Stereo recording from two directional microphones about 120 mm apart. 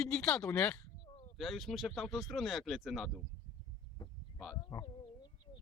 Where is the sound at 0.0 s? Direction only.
5° left (ahead or behind).